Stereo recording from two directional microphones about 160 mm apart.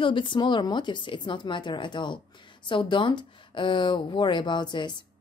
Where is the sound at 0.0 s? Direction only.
30° left (ahead or behind).